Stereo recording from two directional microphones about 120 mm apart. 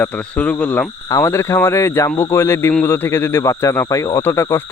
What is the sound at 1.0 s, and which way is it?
Speech, 25° left (ahead or behind).